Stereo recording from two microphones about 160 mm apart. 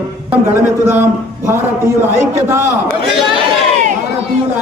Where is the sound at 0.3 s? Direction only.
15° right (ahead or behind).